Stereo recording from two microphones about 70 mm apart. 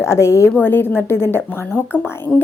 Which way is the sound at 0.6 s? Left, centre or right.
Left.